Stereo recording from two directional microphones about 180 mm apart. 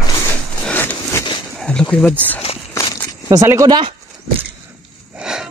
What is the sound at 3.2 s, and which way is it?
Speech, 20° right (ahead or behind).